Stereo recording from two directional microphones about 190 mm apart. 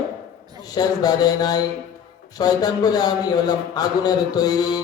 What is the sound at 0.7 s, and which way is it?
Speech, 20° left (ahead or behind).